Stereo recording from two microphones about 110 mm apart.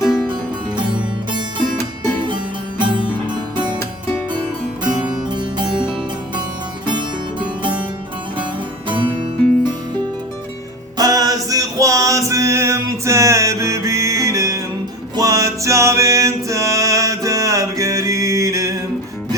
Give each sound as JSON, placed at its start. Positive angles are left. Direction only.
{"t": 0.8, "sound": "music", "side_deg": -45}
{"t": 4.9, "sound": "music", "side_deg": -10}
{"t": 5.3, "sound": "music", "side_deg": -45}
{"t": 8.9, "sound": "music", "side_deg": -50}
{"t": 10.9, "sound": "music", "side_deg": -35}